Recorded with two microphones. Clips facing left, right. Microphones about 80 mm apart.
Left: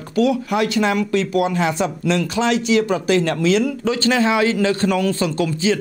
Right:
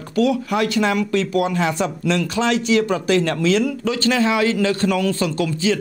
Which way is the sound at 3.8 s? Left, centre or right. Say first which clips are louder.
Left 1 dB; left.